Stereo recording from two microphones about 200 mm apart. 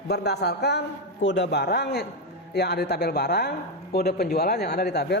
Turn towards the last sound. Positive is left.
turn(degrees=55)  # may be behind; listen again after turning